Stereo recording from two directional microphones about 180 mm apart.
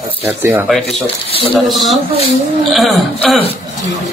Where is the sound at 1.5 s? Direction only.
Centre (ahead or behind).